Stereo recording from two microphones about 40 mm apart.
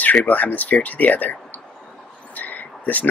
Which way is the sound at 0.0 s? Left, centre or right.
Left.